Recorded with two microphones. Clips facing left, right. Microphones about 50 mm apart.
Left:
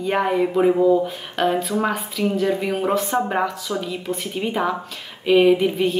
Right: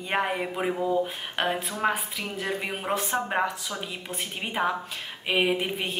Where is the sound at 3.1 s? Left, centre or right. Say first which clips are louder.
Left 5 dB; centre.